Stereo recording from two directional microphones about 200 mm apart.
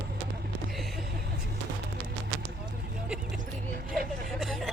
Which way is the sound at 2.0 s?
55° right (ahead or behind).